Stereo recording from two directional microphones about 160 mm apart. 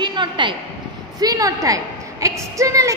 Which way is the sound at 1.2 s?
20° right (ahead or behind).